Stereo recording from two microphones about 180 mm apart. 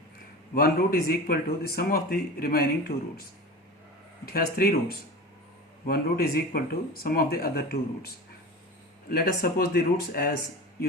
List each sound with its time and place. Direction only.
0.5 s speech: 55° left (ahead or behind)
4.3 s speech: 55° left (ahead or behind)